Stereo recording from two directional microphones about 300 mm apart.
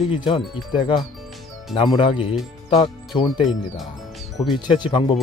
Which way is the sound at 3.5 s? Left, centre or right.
Centre.